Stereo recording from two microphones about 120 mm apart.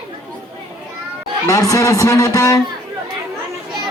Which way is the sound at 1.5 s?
30° left (ahead or behind).